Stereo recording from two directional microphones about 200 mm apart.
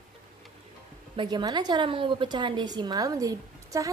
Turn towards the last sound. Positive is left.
turn(degrees=-15)  # may be behind; listen again after turning